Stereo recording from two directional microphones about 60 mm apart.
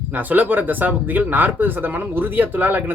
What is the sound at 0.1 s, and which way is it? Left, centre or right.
Speech, right.